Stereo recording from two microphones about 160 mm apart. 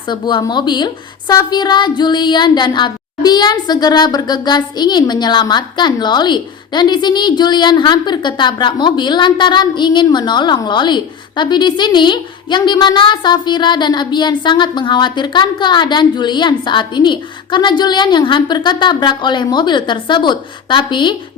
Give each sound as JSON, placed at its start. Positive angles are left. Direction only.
{"t": 0.1, "sound": "child singing", "side_deg": 30}